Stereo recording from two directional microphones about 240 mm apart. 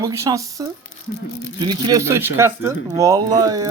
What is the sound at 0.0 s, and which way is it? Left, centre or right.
Speech, centre.